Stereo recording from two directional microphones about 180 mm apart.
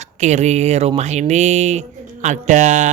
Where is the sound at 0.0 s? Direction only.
40° right (ahead or behind).